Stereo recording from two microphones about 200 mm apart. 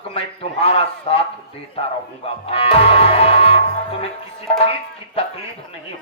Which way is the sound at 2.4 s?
30° left (ahead or behind).